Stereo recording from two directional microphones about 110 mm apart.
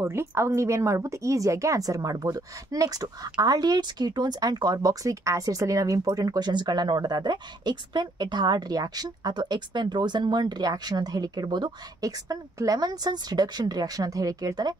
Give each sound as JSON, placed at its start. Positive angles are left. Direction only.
{"t": 0.0, "sound": "speech", "side_deg": -25}